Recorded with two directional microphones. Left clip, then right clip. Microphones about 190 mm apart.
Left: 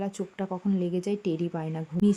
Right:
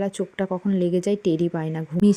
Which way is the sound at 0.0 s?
25° right (ahead or behind).